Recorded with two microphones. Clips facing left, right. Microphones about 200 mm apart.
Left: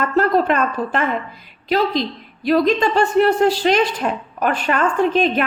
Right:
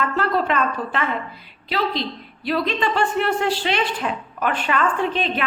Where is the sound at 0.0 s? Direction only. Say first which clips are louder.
Left 5 dB; 45° left (ahead or behind).